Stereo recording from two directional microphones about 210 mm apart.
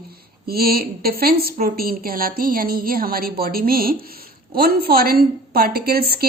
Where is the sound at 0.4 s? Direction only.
45° right (ahead or behind).